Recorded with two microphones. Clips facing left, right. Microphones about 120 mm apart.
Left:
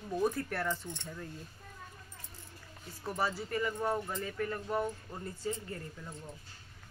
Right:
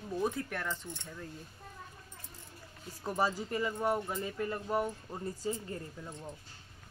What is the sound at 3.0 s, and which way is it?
Speech, 15° right (ahead or behind).